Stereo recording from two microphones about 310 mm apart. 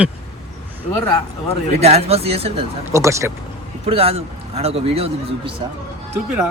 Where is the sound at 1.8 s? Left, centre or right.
Centre.